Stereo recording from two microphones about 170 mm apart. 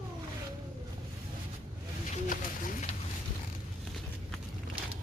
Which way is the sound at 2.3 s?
50° left (ahead or behind).